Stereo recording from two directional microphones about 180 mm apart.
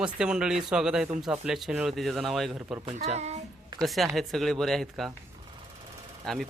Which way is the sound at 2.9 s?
35° right (ahead or behind).